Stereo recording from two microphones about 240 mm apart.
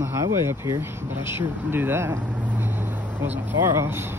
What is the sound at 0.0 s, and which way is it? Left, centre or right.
Speech, centre.